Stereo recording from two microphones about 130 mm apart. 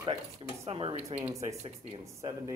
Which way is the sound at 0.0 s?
40° right (ahead or behind).